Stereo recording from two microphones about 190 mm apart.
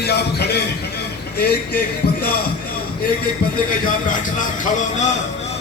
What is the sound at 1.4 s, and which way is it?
Speech, 55° left (ahead or behind).